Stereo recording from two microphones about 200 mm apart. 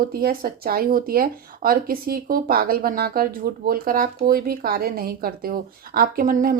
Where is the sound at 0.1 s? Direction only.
50° right (ahead or behind).